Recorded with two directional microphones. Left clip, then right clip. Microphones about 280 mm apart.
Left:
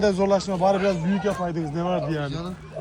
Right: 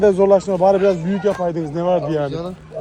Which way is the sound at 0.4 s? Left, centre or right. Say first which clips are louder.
Right 7 dB; right.